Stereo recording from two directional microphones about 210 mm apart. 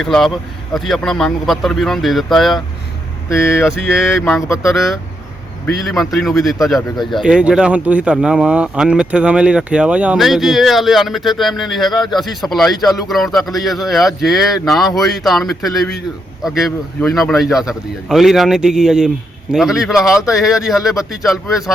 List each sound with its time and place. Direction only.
0.0 s a man's voice: centre (ahead or behind)
3.2 s speech: 10° left (ahead or behind)
3.7 s a man's voice: centre (ahead or behind)
6.9 s speech: 20° left (ahead or behind)
7.2 s a man's voice: 5° right (ahead or behind)